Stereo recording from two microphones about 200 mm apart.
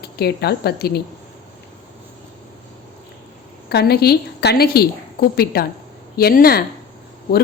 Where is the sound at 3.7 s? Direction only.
55° left (ahead or behind).